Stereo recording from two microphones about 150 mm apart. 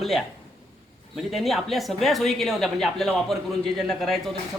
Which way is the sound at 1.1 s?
Centre (ahead or behind).